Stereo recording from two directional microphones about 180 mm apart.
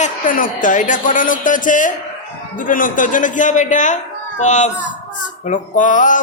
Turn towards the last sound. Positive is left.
turn(degrees=45)  # may be behind; listen again after turning